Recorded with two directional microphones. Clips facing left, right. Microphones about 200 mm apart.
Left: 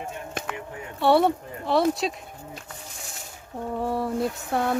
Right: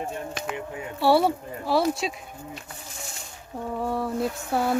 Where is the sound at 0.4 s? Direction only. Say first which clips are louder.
Even; 55° left (ahead or behind).